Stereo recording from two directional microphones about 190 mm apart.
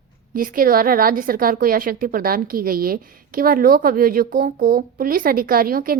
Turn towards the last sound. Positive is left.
turn(degrees=-50)  # may be behind; listen again after turning